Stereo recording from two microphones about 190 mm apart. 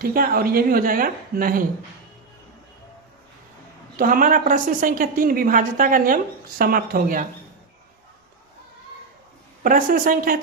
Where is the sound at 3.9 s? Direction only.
45° right (ahead or behind).